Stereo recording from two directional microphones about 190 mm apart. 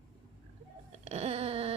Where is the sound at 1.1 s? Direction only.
30° right (ahead or behind).